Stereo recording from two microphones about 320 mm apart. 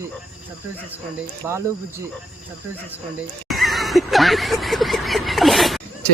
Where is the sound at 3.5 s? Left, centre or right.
Centre.